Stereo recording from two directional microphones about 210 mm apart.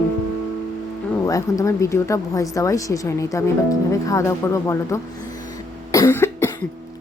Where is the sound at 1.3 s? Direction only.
15° left (ahead or behind).